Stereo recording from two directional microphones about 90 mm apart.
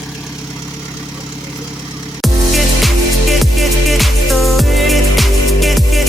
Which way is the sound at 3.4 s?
Centre (ahead or behind).